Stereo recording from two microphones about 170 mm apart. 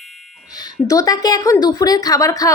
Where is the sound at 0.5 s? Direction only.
20° left (ahead or behind).